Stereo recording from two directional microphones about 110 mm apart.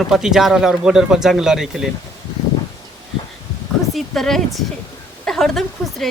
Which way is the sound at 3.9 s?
5° left (ahead or behind).